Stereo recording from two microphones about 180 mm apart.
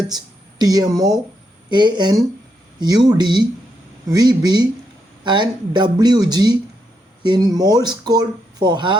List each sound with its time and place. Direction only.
0.6 s speech: 20° right (ahead or behind)